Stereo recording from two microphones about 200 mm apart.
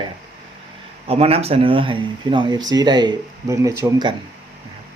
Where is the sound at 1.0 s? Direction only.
30° right (ahead or behind).